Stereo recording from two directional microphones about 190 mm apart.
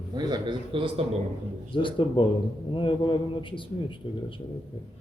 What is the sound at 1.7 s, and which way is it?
A man's voice, 25° left (ahead or behind).